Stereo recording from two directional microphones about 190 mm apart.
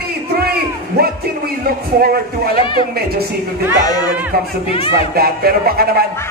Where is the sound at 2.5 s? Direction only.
25° left (ahead or behind).